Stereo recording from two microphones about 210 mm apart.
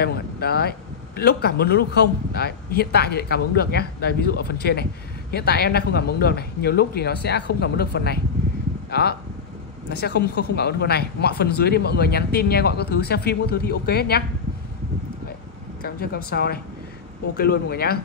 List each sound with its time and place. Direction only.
0.0 s speech: 50° left (ahead or behind)
9.8 s speech: 50° left (ahead or behind)
15.8 s speech: 45° left (ahead or behind)